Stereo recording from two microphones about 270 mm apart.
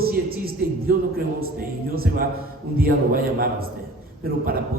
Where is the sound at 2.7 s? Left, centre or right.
Right.